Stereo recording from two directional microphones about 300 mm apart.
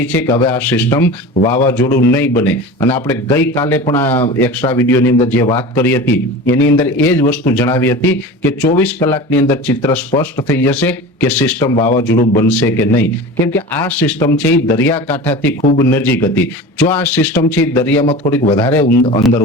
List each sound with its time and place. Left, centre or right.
0.0 s a man's voice: centre
6.4 s a man's voice: left
6.7 s a man's voice: centre
12.0 s a man's voice: left
12.4 s a man's voice: centre
18.0 s a man's voice: centre